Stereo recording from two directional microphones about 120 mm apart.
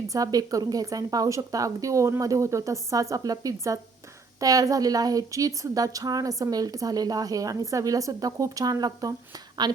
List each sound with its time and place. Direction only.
0.1 s a woman's voice: 30° right (ahead or behind)